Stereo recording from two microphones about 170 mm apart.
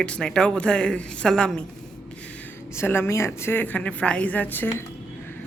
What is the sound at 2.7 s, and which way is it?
Speech, 15° left (ahead or behind).